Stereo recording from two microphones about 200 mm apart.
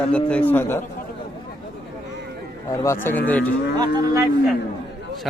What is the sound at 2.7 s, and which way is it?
Speech, 10° left (ahead or behind).